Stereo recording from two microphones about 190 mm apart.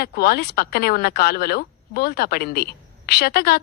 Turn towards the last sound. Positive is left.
turn(degrees=55)  # may be behind; listen again after turning